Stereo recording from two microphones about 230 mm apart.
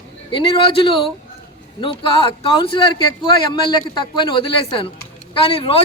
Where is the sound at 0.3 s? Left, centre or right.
Left.